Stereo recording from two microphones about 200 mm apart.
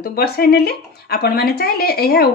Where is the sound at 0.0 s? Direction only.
50° left (ahead or behind).